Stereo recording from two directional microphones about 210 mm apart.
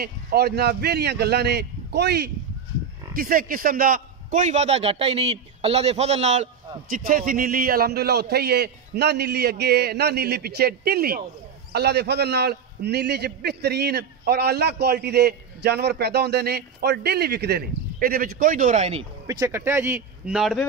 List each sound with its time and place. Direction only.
0.0 s a man's voice: 50° right (ahead or behind); by 19.0 s 30° right (ahead or behind)
19.2 s speech: 15° right (ahead or behind)